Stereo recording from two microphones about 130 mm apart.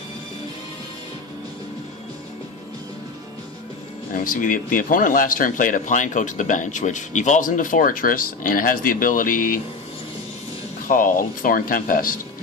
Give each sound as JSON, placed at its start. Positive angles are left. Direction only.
{"t": 4.1, "sound": "speech", "side_deg": 90}
{"t": 10.8, "sound": "speech", "side_deg": 90}